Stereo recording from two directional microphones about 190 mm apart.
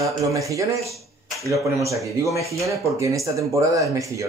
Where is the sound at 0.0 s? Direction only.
15° right (ahead or behind).